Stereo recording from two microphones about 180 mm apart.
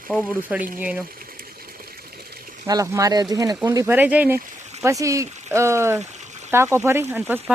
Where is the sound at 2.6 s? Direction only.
20° right (ahead or behind).